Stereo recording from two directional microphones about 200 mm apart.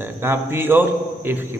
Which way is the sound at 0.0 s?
10° right (ahead or behind).